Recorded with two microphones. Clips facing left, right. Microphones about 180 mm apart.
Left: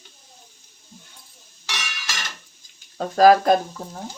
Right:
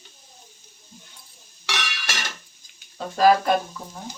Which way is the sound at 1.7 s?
65° right (ahead or behind).